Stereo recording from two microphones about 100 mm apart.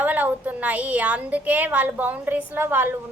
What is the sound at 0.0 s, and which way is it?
A woman's voice, 15° right (ahead or behind).